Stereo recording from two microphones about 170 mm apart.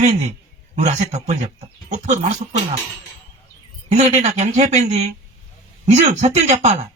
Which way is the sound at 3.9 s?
40° right (ahead or behind).